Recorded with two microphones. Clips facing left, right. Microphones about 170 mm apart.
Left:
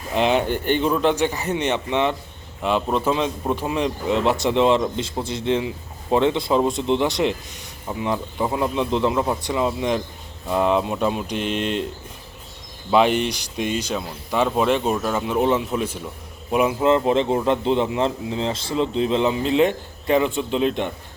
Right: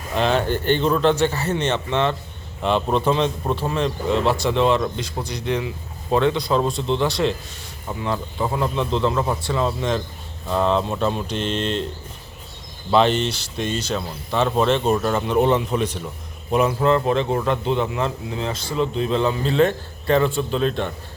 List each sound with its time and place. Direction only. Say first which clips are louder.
0.1 s a man's voice: left 1 dB; 15° left (ahead or behind)
12.9 s a man's voice: even; 10° left (ahead or behind)
16.8 s speech: left 1 dB; 20° left (ahead or behind)